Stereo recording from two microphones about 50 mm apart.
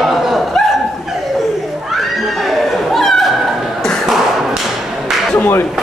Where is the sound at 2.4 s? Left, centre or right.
Centre.